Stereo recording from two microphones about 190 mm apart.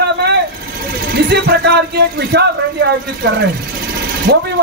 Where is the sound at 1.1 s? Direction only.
55° right (ahead or behind).